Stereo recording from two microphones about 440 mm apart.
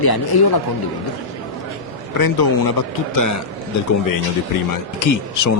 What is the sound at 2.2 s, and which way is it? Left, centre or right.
Speech, left.